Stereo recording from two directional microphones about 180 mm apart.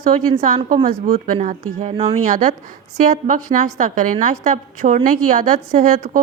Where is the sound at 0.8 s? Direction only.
50° right (ahead or behind).